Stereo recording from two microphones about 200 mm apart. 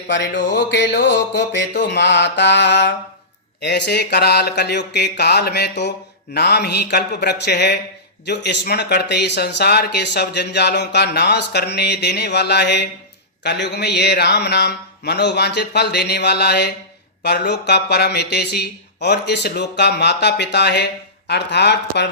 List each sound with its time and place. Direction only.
0.1 s speech: 60° left (ahead or behind)